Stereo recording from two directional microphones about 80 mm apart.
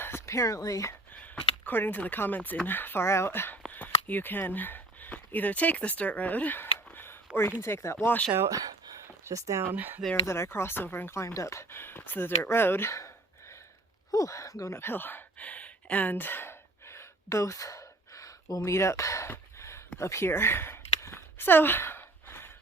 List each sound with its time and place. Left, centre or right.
0.0 s speech: left
1.6 s speech: left
3.7 s a sound: left
7.6 s speech: left
9.2 s speech: right
9.7 s speech: right
10.2 s speech: left
14.1 s a sound: left